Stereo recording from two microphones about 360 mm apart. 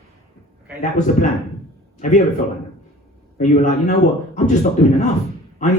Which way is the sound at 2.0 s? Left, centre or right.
Left.